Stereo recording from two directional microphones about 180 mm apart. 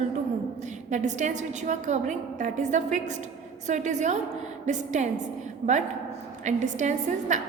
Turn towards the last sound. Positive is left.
turn(degrees=-45)  # may be behind; listen again after turning